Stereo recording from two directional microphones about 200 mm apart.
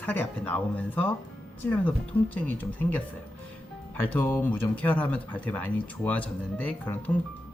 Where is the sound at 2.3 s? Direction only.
10° left (ahead or behind).